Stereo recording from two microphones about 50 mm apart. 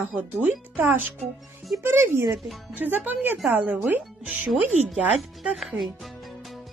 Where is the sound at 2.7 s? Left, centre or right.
Right.